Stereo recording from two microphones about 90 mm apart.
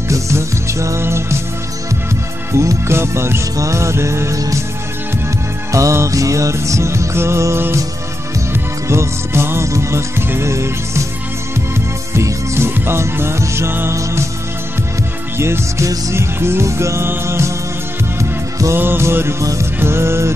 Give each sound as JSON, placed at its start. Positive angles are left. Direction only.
{"t": 0.1, "sound": "music", "side_deg": -35}
{"t": 2.5, "sound": "music", "side_deg": -35}
{"t": 5.7, "sound": "music", "side_deg": -35}
{"t": 8.8, "sound": "music", "side_deg": -30}
{"t": 12.1, "sound": "music", "side_deg": -30}
{"t": 15.3, "sound": "music", "side_deg": -30}
{"t": 18.8, "sound": "music", "side_deg": -25}